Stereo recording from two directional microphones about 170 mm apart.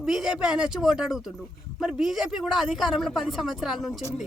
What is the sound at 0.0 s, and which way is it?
A woman's voice, 5° right (ahead or behind).